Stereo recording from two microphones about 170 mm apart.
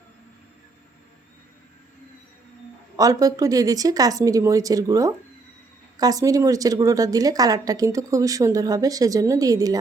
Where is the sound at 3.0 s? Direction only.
20° right (ahead or behind).